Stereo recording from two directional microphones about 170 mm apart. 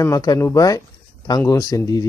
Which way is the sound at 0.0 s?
20° left (ahead or behind).